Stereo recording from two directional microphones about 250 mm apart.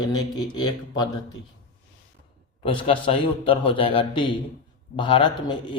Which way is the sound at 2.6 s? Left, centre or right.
Left.